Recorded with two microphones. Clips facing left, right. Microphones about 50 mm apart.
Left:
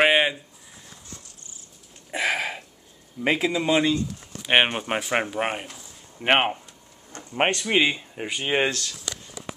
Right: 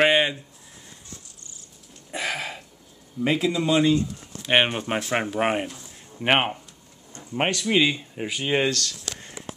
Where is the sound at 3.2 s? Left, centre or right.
Left.